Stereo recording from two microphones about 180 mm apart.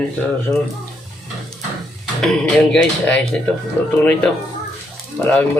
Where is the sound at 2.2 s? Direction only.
5° left (ahead or behind).